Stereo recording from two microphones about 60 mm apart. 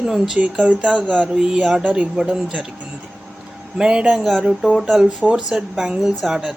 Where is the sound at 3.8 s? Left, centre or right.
Centre.